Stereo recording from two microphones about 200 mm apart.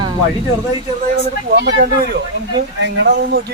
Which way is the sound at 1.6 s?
60° right (ahead or behind).